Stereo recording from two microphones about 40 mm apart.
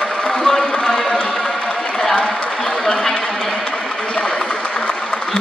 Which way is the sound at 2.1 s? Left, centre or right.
Centre.